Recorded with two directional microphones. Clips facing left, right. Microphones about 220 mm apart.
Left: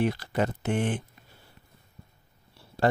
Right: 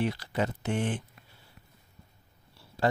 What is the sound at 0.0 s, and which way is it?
Speech, 50° left (ahead or behind).